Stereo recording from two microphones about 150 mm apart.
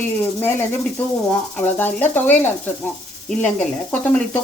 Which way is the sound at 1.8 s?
10° left (ahead or behind).